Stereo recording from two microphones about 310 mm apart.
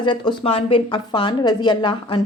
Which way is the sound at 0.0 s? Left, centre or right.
Centre.